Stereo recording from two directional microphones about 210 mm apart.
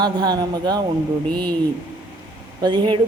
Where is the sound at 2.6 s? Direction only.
20° right (ahead or behind).